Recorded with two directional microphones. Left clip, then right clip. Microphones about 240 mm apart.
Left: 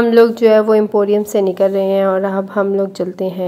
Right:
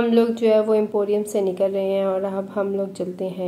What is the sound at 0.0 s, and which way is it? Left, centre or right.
A woman's voice, left.